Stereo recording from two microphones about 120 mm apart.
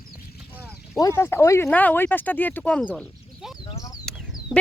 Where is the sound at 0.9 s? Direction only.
25° left (ahead or behind).